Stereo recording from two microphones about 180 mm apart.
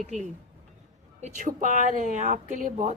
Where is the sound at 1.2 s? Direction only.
40° right (ahead or behind).